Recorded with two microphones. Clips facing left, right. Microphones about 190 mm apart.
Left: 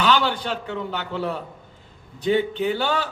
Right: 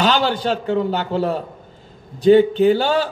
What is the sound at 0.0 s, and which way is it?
A man's voice, 40° right (ahead or behind).